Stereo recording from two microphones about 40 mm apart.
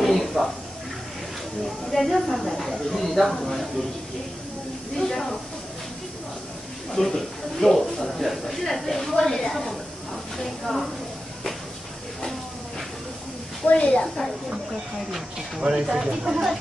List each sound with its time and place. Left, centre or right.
0.0 s a sound: centre
1.9 s speech: centre
4.9 s speech: centre
6.9 s speech: centre
13.6 s a woman's voice: left
14.0 s speech: centre
15.0 s speech: centre
15.7 s speech: centre